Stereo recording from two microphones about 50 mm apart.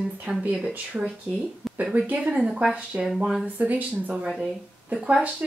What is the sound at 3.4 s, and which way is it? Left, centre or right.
Speech, right.